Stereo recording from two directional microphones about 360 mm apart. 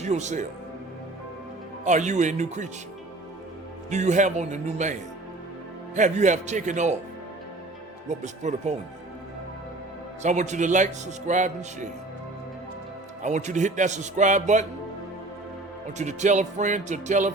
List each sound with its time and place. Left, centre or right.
0.0 s speech: centre
1.8 s a man's voice: centre
3.8 s a man's voice: centre
8.2 s a man's voice: centre
10.2 s a man's voice: centre
13.2 s a man's voice: centre
16.0 s a man's voice: centre